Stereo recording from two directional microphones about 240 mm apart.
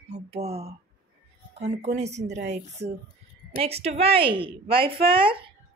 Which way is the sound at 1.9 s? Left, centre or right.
Right.